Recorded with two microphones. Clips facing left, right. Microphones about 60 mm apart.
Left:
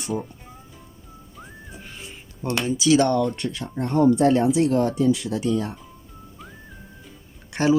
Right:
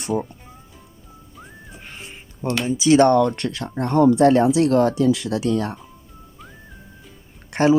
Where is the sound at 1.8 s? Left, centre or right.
Right.